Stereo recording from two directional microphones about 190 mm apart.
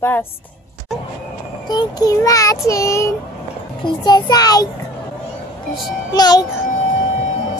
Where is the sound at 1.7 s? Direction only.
20° left (ahead or behind).